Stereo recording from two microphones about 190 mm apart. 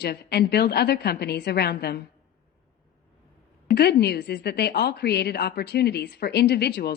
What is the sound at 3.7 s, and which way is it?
A woman's voice, 60° left (ahead or behind).